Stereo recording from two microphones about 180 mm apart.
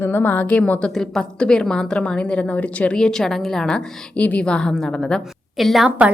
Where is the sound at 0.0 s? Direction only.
10° left (ahead or behind).